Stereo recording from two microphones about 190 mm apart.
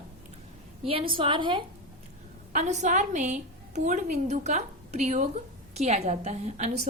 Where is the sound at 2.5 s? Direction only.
40° right (ahead or behind).